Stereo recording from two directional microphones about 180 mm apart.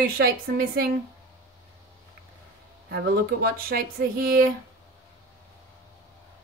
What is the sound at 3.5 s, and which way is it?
Speech, 55° right (ahead or behind).